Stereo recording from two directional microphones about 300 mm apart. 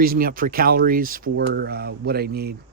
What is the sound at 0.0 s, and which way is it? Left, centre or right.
Speech, right.